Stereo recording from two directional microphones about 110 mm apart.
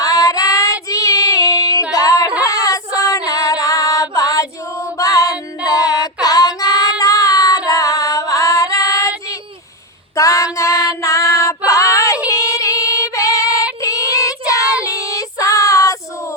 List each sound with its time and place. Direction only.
0.0 s child singing: 30° left (ahead or behind)
2.4 s female singing: 30° left (ahead or behind)
6.2 s child singing: 35° left (ahead or behind)
7.0 s female singing: 35° left (ahead or behind)
12.3 s music: 30° left (ahead or behind)
13.8 s child singing: 30° left (ahead or behind)